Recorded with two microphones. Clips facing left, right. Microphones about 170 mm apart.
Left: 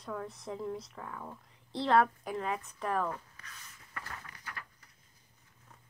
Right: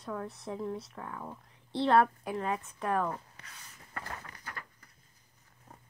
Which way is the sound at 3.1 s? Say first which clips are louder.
Right 1 dB; 30° right (ahead or behind).